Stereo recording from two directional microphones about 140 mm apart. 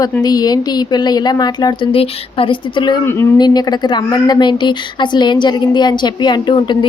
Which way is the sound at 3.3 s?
30° left (ahead or behind).